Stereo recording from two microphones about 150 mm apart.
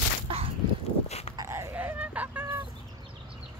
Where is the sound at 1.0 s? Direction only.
45° left (ahead or behind).